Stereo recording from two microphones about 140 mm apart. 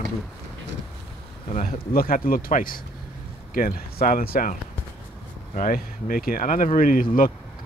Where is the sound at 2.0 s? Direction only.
90° left.